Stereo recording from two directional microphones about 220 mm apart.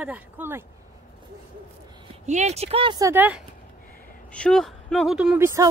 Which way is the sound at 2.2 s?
30° right (ahead or behind).